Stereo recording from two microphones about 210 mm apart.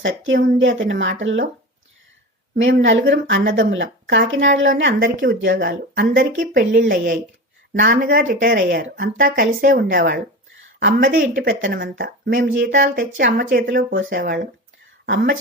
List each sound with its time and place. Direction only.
0.0 s speech: 60° right (ahead or behind)
2.8 s speech: 60° right (ahead or behind); by 14.3 s 45° right (ahead or behind)
15.0 s speech: 55° right (ahead or behind)